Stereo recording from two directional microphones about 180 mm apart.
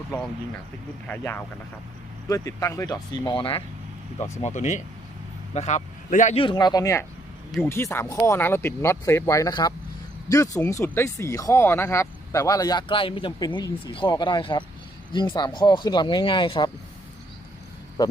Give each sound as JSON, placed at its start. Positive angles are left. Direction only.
{"t": 1.0, "sound": "speech", "side_deg": 10}
{"t": 4.4, "sound": "a man's voice", "side_deg": 40}
{"t": 6.4, "sound": "speech", "side_deg": 25}